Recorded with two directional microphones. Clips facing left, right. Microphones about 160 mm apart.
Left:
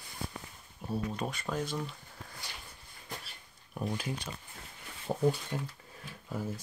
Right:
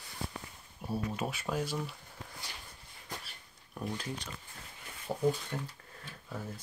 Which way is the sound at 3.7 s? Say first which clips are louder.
Left 3 dB; 10° left (ahead or behind).